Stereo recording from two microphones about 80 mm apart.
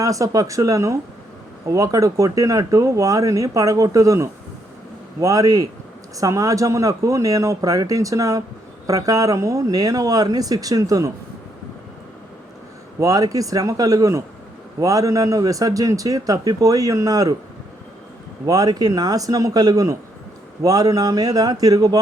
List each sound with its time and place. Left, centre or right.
0.0 s speech: right
13.0 s speech: right
18.4 s speech: right